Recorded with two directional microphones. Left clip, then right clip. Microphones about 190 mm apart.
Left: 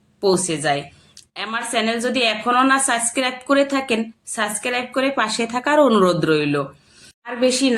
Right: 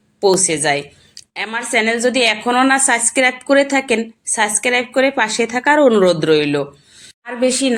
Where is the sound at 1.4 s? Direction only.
10° right (ahead or behind).